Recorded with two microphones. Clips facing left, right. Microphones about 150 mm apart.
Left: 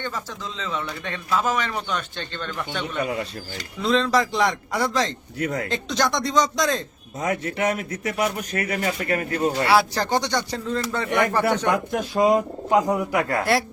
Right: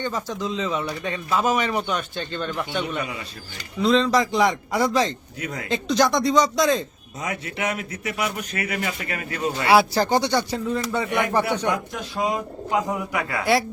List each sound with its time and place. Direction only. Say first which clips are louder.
0.0 s a man's voice: right 4 dB; 15° right (ahead or behind)
3.8 s a man's voice: right 2 dB; centre (ahead or behind)
5.4 s a man's voice: left 7 dB; 50° left (ahead or behind)
5.6 s a man's voice: right 3 dB; centre (ahead or behind)
7.2 s a man's voice: left 4 dB; 45° left (ahead or behind)
9.6 s a man's voice: right 6 dB; 10° right (ahead or behind)
11.7 s a man's voice: left 4 dB; 50° left (ahead or behind)
13.4 s a man's voice: right 6 dB; centre (ahead or behind)